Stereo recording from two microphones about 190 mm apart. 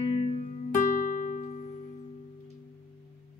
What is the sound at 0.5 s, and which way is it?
Music, 40° left (ahead or behind).